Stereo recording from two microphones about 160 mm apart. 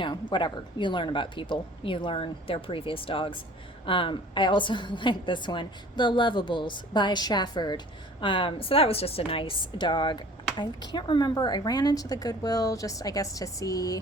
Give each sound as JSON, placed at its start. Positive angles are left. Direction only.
{"t": 0.0, "sound": "a woman's voice", "side_deg": 30}